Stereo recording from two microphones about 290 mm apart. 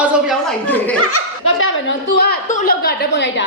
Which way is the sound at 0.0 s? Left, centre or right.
Centre.